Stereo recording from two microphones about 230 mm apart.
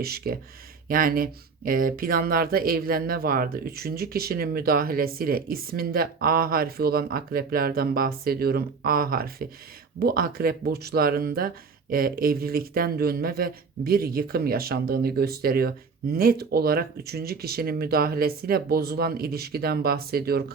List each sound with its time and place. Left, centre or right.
0.0 s speech: right